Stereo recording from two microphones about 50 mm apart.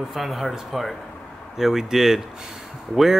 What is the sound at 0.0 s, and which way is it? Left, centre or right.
Speech, centre.